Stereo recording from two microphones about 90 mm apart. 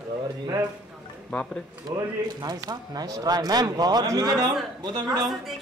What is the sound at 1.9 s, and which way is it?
A man's voice, 35° right (ahead or behind).